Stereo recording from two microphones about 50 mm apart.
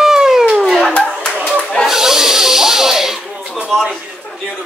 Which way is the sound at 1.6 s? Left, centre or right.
Centre.